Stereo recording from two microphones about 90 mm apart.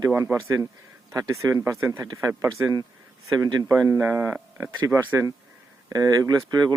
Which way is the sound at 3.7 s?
30° right (ahead or behind).